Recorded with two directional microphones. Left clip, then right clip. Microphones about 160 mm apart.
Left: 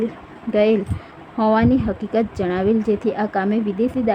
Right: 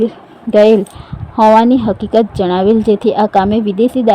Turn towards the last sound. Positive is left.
turn(degrees=0)  # may be behind; listen again after turning